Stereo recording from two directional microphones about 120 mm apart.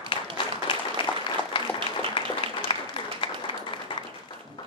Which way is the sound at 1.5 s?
45° left (ahead or behind).